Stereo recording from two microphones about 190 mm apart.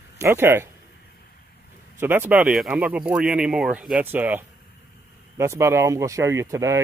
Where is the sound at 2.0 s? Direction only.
10° right (ahead or behind).